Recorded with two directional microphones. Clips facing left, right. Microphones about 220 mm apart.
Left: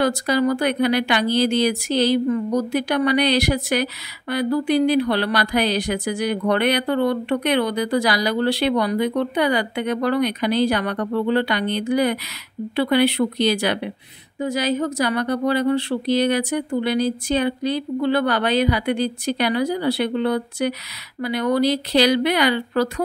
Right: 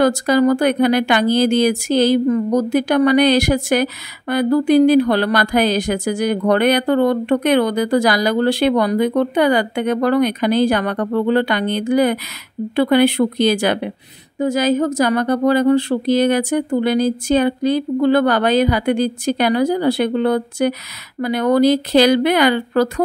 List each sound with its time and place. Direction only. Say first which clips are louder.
0.0 s speech: right 5 dB; 45° right (ahead or behind)